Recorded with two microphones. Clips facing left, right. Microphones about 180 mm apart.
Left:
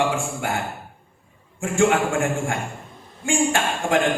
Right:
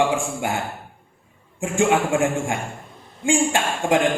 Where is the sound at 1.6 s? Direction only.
15° right (ahead or behind).